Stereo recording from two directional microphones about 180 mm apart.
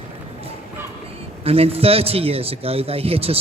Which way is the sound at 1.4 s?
35° right (ahead or behind).